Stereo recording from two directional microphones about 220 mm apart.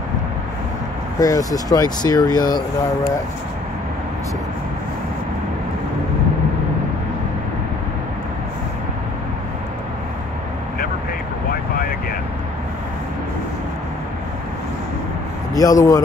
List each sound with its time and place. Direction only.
1.2 s speech: 15° left (ahead or behind)
15.5 s speech: 15° left (ahead or behind)